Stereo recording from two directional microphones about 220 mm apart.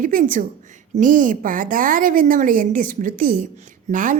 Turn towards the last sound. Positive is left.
turn(degrees=-35)  # may be behind; listen again after turning